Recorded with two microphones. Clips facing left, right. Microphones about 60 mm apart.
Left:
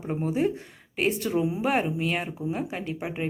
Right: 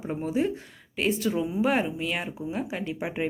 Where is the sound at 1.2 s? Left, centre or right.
Centre.